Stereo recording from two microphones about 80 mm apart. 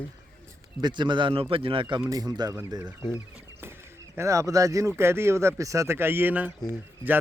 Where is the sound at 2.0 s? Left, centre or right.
Right.